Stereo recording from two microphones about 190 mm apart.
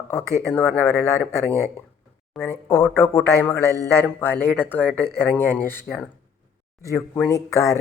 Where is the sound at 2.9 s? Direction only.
10° left (ahead or behind).